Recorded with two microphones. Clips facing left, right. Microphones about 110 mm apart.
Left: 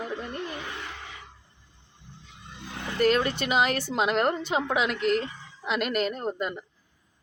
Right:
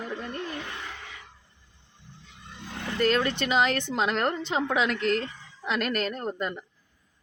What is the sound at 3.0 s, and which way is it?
A woman's voice, 15° left (ahead or behind).